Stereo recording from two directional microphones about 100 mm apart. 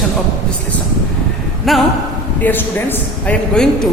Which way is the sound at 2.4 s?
20° left (ahead or behind).